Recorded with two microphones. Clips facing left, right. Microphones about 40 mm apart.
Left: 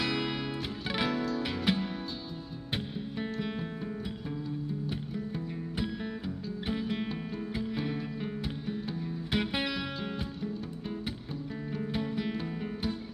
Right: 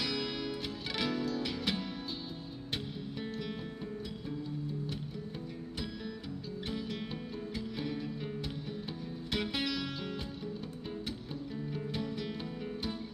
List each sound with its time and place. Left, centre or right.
0.0 s music: centre
6.7 s music: left
11.7 s music: centre